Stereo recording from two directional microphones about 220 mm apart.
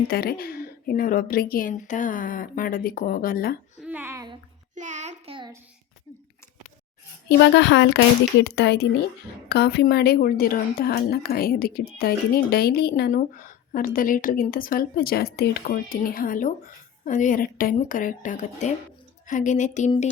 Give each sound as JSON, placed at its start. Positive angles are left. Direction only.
{"t": 0.1, "sound": "a woman's voice", "side_deg": 45}
{"t": 3.8, "sound": "a sound", "side_deg": -5}
{"t": 4.7, "sound": "child singing", "side_deg": -35}
{"t": 7.3, "sound": "a woman's voice", "side_deg": 50}